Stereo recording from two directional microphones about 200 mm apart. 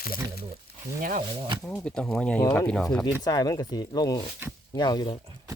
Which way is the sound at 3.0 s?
20° left (ahead or behind).